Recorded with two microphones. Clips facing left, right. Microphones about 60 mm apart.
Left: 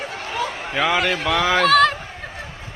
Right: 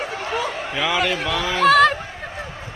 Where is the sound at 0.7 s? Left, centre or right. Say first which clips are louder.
Left 4 dB; left.